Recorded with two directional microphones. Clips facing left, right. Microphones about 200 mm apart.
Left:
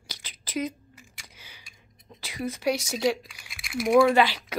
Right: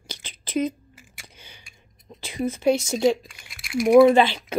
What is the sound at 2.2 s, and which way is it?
A woman's voice, 25° right (ahead or behind).